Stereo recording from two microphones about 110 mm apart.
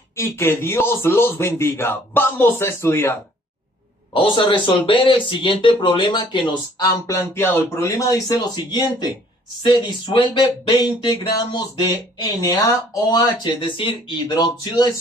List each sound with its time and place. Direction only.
0.1 s a man's voice: 25° left (ahead or behind)
4.1 s speech: 50° left (ahead or behind); by 8.1 s 25° left (ahead or behind)
8.1 s speech: 35° left (ahead or behind)
14.2 s speech: 40° left (ahead or behind)